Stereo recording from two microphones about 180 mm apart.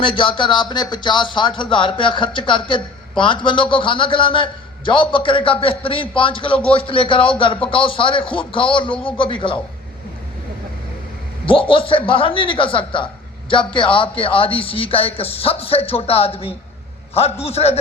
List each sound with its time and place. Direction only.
0.0 s speech: 30° left (ahead or behind)
11.4 s speech: 30° left (ahead or behind)